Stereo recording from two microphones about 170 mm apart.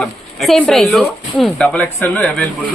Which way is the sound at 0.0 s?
Centre (ahead or behind).